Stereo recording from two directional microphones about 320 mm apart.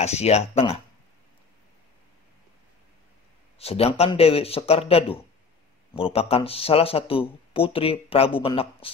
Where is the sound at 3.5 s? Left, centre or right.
Centre.